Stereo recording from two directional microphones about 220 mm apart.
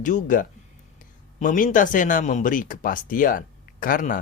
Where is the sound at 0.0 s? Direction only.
35° left (ahead or behind).